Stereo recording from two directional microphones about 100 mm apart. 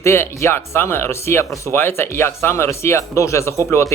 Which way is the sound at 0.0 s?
25° left (ahead or behind).